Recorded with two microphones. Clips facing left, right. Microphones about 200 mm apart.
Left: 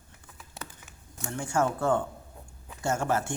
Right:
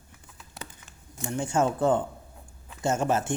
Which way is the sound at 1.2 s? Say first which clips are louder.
Right 2 dB; 20° right (ahead or behind).